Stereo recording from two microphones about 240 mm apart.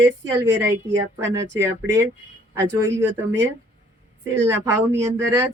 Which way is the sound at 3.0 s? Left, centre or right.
Right.